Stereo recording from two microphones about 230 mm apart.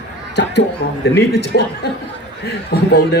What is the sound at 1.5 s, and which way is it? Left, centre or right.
Speech, left.